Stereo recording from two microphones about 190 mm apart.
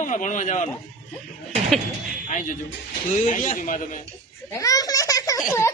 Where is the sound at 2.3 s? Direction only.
45° left (ahead or behind).